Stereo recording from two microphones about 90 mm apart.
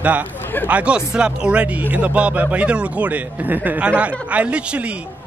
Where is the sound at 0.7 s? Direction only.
15° right (ahead or behind).